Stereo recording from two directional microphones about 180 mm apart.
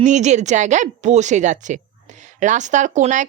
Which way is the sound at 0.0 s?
40° right (ahead or behind).